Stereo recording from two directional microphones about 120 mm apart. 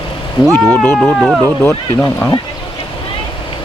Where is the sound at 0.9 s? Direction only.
Centre (ahead or behind).